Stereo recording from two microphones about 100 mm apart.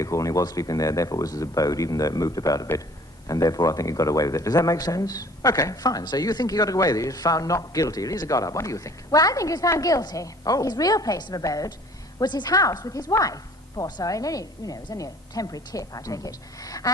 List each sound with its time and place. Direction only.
0.0 s a man's voice: 35° left (ahead or behind)